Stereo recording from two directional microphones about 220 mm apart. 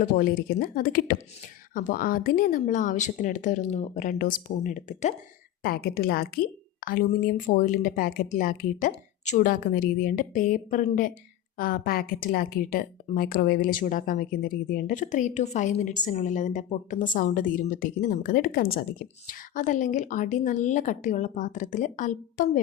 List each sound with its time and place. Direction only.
0.0 s speech: 40° left (ahead or behind)